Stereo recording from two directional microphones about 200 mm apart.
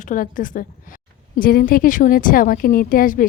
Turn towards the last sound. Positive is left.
turn(degrees=45)  # may be behind; listen again after turning